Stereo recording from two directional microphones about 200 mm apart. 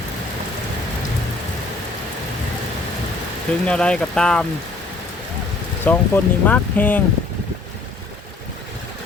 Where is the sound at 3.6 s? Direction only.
5° left (ahead or behind).